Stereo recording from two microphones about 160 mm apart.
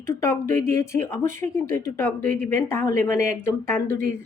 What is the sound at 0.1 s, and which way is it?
Speech, 15° left (ahead or behind).